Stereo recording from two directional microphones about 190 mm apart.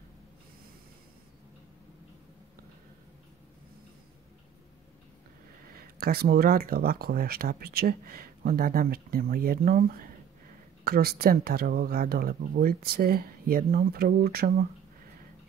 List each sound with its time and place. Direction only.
5.8 s speech: 50° right (ahead or behind)